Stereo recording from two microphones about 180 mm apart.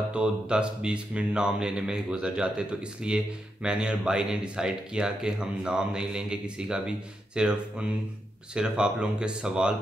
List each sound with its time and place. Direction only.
0.1 s speech: 5° right (ahead or behind)